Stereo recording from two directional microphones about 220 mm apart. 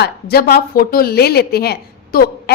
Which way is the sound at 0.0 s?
45° left (ahead or behind).